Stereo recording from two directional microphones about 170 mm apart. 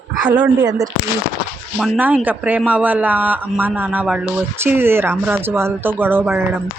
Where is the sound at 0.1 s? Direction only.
5° right (ahead or behind).